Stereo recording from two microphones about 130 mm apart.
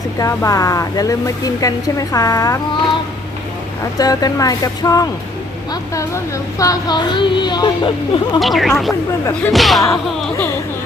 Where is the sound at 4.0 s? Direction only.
30° left (ahead or behind).